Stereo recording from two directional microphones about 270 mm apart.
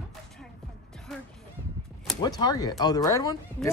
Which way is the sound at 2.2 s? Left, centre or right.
Centre.